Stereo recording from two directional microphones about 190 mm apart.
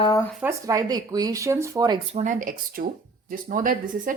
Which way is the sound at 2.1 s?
40° right (ahead or behind).